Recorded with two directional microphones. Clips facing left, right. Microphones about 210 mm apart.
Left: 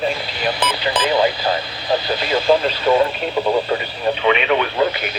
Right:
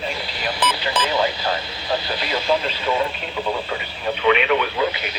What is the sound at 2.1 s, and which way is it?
Radio, 45° left (ahead or behind).